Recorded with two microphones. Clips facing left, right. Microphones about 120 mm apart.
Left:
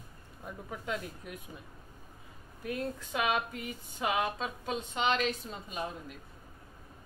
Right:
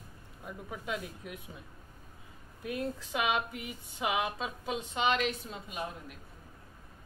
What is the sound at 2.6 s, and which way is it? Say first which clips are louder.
Speech: even; 15° right (ahead or behind).